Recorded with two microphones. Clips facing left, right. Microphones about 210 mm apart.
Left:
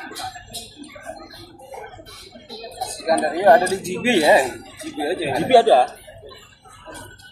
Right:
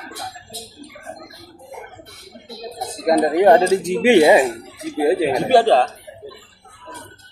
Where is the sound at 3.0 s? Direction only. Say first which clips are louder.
Right 3 dB; 25° right (ahead or behind).